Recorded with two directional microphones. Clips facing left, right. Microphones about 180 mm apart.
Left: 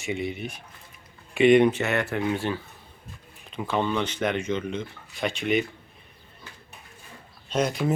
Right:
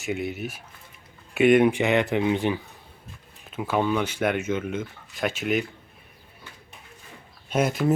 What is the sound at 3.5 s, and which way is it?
Speech, 5° right (ahead or behind).